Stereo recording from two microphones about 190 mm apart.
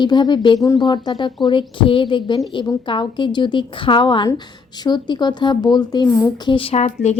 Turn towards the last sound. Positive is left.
turn(degrees=35)  # may be behind; listen again after turning